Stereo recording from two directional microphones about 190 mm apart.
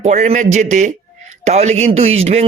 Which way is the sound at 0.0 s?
35° right (ahead or behind).